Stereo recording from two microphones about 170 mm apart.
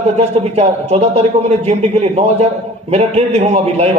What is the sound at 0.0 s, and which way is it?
A man's voice, 40° right (ahead or behind).